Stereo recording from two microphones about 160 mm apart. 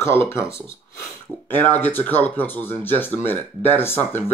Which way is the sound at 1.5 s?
10° left (ahead or behind).